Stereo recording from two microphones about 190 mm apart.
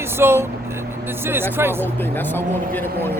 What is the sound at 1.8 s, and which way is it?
Speech, 10° left (ahead or behind).